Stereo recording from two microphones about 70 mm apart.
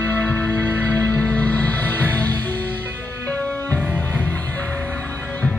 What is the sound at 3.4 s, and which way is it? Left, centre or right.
Music, left.